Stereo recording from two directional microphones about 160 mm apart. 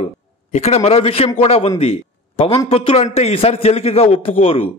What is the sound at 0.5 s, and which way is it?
A man's voice, 40° left (ahead or behind).